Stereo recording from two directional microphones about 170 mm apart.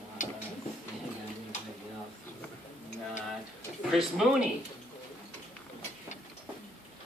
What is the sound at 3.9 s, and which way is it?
Speech, centre (ahead or behind).